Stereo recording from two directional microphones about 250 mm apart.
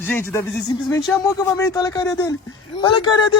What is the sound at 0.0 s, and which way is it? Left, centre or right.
Speech, centre.